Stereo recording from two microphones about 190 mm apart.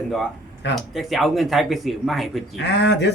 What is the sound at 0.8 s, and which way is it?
Speech, centre (ahead or behind).